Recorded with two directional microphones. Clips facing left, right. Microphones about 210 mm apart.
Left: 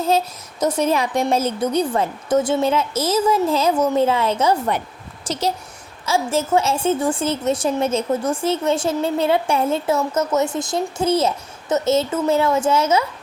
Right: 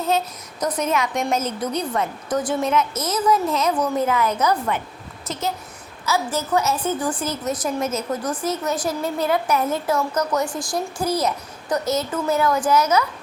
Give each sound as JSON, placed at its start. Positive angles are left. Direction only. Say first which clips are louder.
{"t": 0.6, "sound": "a woman's voice", "louder": "left 4 dB", "side_deg": 30}
{"t": 5.2, "sound": "a child's voice", "louder": "left 4 dB", "side_deg": 90}
{"t": 6.1, "sound": "a woman's voice", "louder": "left 3 dB", "side_deg": 25}